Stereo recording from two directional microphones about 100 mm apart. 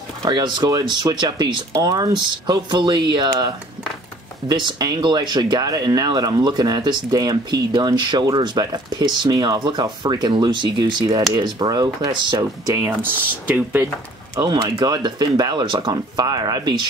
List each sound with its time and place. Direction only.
0.3 s speech: 50° right (ahead or behind)
12.6 s speech: 30° right (ahead or behind)
13.0 s speech: 20° right (ahead or behind)
14.4 s speech: 40° right (ahead or behind)